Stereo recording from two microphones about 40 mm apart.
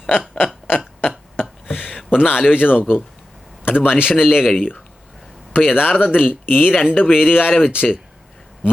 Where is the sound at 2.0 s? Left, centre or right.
Left.